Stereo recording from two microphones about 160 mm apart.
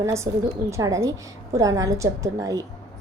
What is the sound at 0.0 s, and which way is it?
A woman's voice, 20° right (ahead or behind).